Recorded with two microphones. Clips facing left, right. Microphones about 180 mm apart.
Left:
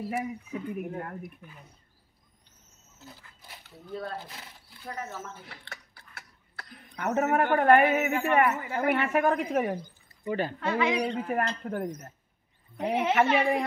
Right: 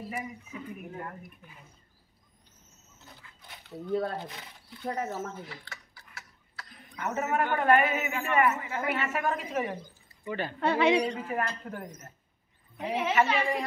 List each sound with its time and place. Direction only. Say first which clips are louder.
0.1 s a man's voice: left 6 dB; 60° left (ahead or behind)
4.2 s speech: right 3 dB; 5° left (ahead or behind)
4.8 s speech: right 5 dB; 30° right (ahead or behind)
5.5 s a sound: right 1 dB; 60° left (ahead or behind)
7.2 s a man's voice: left 4 dB; 60° left (ahead or behind)
10.2 s speech: left 4 dB; 40° left (ahead or behind)
10.6 s a woman's voice: right 5 dB; 30° right (ahead or behind)
11.1 s a man's voice: left 3 dB; 55° left (ahead or behind)